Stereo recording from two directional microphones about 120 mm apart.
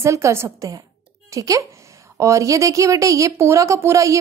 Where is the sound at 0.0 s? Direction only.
25° right (ahead or behind).